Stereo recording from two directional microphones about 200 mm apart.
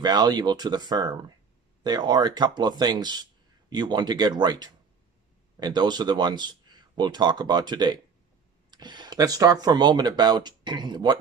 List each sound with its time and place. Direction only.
0.0 s speech: 20° right (ahead or behind)